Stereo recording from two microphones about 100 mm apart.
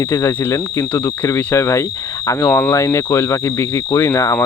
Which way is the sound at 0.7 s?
20° left (ahead or behind).